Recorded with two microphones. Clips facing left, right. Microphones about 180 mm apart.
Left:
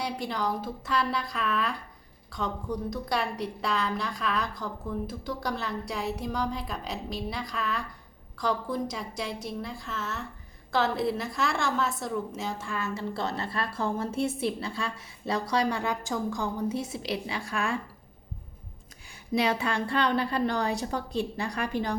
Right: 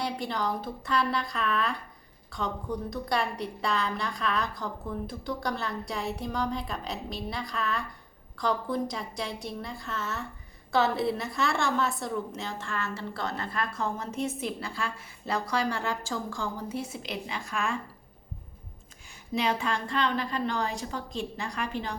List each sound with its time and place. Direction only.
0.0 s a woman's voice: centre (ahead or behind)
13.1 s a woman's voice: 25° left (ahead or behind)
19.9 s a woman's voice: 35° left (ahead or behind)